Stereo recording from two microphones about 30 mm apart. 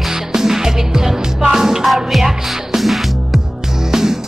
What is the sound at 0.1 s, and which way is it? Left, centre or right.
Music, centre.